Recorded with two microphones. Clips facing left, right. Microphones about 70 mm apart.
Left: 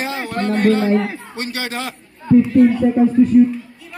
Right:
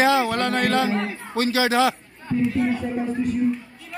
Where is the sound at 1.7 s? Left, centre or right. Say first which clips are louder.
Right 7 dB; right.